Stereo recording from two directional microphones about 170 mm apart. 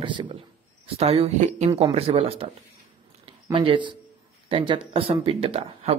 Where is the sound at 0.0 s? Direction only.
30° right (ahead or behind).